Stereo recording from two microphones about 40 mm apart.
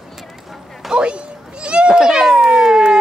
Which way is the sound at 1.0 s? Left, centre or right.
Right.